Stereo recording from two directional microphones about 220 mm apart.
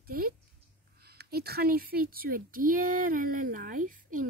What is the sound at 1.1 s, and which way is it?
Speech, 45° right (ahead or behind).